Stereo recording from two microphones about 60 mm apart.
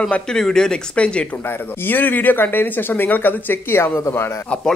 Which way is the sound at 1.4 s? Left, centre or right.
Left.